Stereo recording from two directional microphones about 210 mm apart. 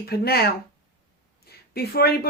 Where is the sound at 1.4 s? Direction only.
45° left (ahead or behind).